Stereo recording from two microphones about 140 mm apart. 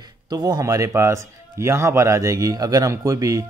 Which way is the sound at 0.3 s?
30° right (ahead or behind).